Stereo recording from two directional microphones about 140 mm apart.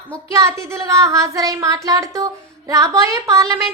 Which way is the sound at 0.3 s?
25° right (ahead or behind).